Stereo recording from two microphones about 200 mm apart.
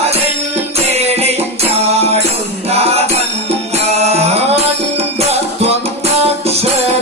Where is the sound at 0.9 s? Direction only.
30° right (ahead or behind).